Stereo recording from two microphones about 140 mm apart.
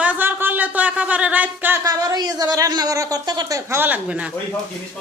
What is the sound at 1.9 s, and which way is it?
A woman's voice, 25° right (ahead or behind).